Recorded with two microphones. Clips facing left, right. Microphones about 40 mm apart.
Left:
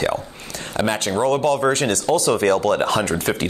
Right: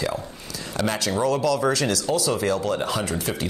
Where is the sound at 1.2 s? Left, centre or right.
Left.